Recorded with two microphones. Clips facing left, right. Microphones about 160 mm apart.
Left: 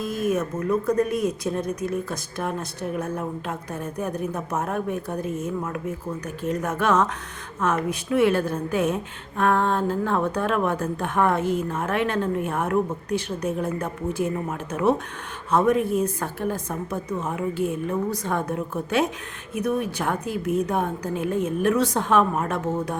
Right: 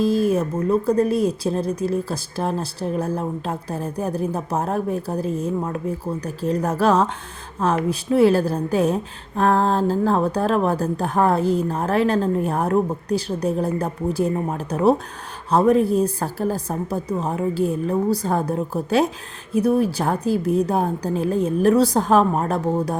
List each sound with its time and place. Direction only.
0.0 s speech: 30° right (ahead or behind)